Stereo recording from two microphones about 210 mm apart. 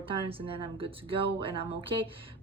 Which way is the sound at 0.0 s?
25° right (ahead or behind).